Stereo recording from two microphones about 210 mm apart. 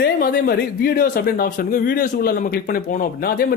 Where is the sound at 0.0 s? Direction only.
45° left (ahead or behind).